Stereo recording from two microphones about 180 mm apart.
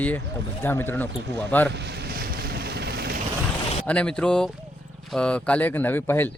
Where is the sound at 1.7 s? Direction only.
65° right (ahead or behind).